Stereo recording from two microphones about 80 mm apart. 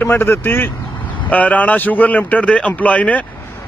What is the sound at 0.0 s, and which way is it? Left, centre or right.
A man's voice, left.